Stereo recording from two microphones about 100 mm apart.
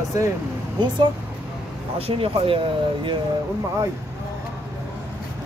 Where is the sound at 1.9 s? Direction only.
75° right (ahead or behind).